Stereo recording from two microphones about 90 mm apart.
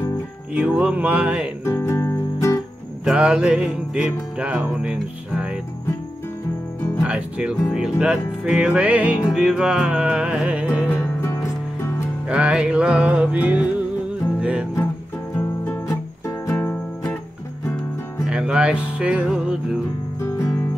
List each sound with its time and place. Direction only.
0.6 s music: 15° right (ahead or behind)
1.6 s music: 30° left (ahead or behind)
3.1 s music: 10° right (ahead or behind)
7.0 s music: 10° right (ahead or behind)
11.0 s music: 30° left (ahead or behind)
12.3 s music: 10° right (ahead or behind)
15.3 s music: 25° left (ahead or behind)
18.2 s music: 10° right (ahead or behind)
20.2 s music: 30° left (ahead or behind)